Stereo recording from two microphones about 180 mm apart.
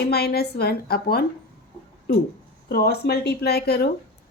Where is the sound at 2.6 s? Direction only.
60° left (ahead or behind).